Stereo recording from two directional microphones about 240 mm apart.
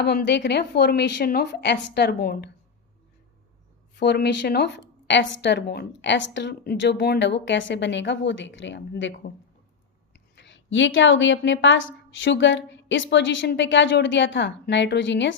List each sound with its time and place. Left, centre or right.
0.0 s speech: left
3.9 s speech: left
10.3 s speech: left